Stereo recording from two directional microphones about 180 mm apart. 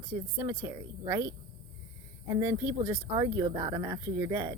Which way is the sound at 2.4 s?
10° right (ahead or behind).